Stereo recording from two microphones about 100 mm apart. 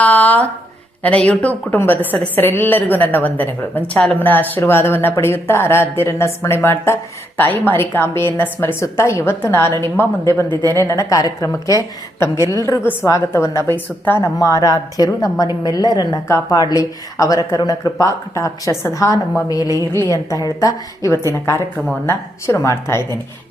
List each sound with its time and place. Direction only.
0.0 s a sound: 15° left (ahead or behind)
1.0 s speech: 10° left (ahead or behind)
10.5 s speech: 45° right (ahead or behind)
10.8 s a woman's voice: 35° left (ahead or behind)
12.8 s speech: 20° left (ahead or behind)
13.1 s speech: 30° left (ahead or behind)
14.3 s a woman's voice: 35° left (ahead or behind)